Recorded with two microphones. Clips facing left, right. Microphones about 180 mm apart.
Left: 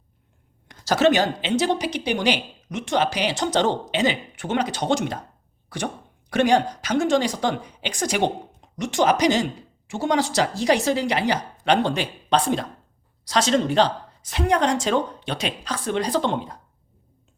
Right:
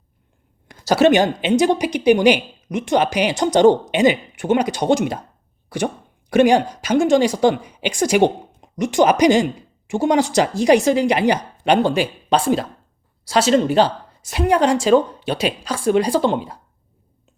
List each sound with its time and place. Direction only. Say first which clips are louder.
0.7 s a woman's voice: right 5 dB; 10° right (ahead or behind)